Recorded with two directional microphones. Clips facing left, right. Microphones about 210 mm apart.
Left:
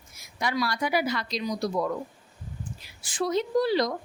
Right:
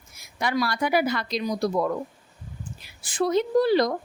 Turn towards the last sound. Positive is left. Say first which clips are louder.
# right 4 dB
turn(degrees=-55)  # may be behind; listen again after turning